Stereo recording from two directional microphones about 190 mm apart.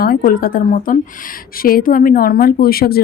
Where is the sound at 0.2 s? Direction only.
45° left (ahead or behind).